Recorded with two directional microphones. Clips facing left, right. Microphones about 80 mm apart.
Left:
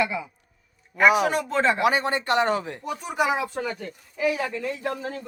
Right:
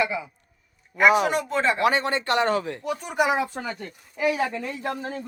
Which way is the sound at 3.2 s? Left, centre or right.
Centre.